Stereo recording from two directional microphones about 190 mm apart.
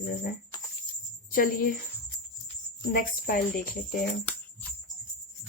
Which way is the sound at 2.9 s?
50° left (ahead or behind).